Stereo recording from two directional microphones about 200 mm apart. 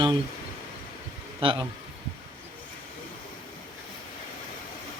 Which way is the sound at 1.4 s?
25° right (ahead or behind).